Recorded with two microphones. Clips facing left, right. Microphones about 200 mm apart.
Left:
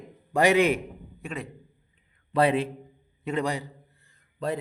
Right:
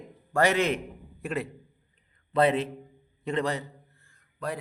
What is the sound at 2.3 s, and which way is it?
A man's voice, 10° left (ahead or behind).